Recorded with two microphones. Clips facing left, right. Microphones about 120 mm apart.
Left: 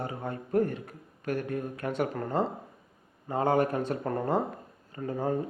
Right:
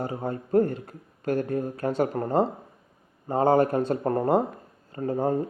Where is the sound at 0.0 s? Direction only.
30° right (ahead or behind).